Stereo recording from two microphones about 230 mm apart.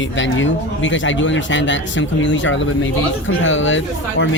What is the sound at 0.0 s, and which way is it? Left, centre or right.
Speech, left.